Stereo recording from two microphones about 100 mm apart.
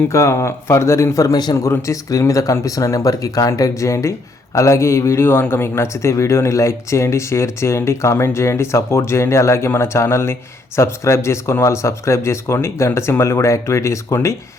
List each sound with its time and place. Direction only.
0.1 s a man's voice: 30° left (ahead or behind)
1.5 s a man's voice: 30° left (ahead or behind)